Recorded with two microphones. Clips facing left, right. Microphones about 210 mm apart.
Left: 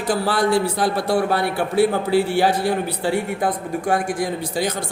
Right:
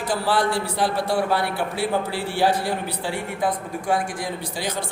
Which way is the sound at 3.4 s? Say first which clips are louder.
Left 3 dB; 50° left (ahead or behind).